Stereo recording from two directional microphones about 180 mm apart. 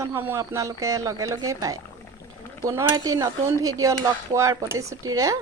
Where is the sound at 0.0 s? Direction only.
15° right (ahead or behind).